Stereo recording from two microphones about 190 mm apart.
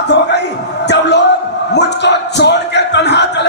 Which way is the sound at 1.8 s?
65° left (ahead or behind).